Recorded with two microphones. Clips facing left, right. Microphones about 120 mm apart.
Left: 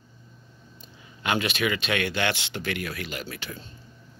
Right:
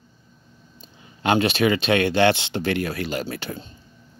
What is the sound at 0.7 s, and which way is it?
Speech, 30° right (ahead or behind).